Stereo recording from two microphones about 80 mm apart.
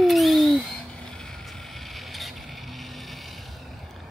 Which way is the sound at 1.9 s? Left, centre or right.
Centre.